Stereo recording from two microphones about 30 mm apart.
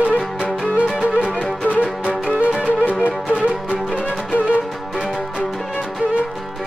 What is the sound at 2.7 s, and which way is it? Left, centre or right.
Music, right.